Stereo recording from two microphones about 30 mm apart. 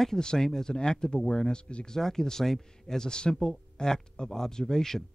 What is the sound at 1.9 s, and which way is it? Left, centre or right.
Speech, centre.